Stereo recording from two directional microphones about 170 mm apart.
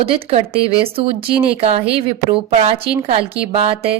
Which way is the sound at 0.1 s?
35° right (ahead or behind).